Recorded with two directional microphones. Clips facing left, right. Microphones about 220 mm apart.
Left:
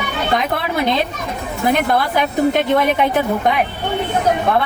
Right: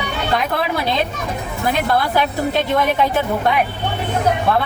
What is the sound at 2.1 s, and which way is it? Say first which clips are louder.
Speech: left 3 dB; 15° left (ahead or behind).